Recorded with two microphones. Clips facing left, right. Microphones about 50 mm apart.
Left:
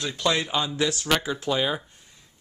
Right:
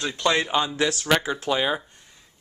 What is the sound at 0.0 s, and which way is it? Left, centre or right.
A man's voice, centre.